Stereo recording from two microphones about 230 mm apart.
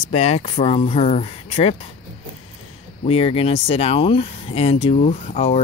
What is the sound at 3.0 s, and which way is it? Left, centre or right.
Speech, left.